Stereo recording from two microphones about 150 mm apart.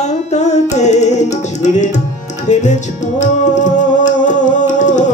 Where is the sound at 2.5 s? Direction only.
50° left (ahead or behind).